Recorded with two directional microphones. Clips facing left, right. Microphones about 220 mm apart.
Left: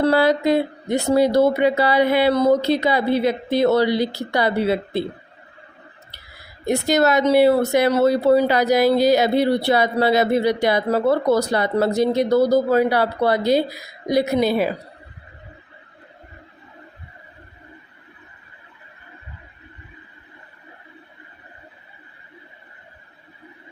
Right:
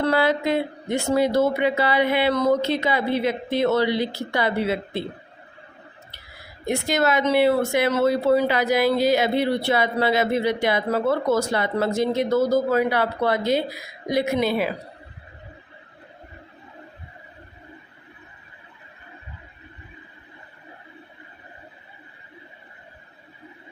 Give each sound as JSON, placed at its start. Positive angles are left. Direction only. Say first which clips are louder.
{"t": 0.0, "sound": "a woman's voice", "louder": "left 4 dB", "side_deg": 35}
{"t": 6.7, "sound": "a woman's voice", "louder": "left 4 dB", "side_deg": 40}